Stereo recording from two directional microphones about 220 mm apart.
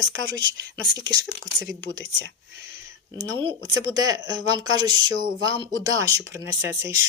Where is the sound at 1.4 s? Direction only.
55° right (ahead or behind).